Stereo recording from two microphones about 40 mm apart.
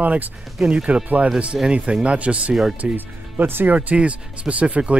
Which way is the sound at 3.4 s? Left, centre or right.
Right.